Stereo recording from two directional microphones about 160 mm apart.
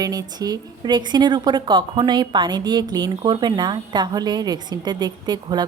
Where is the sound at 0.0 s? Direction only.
25° right (ahead or behind).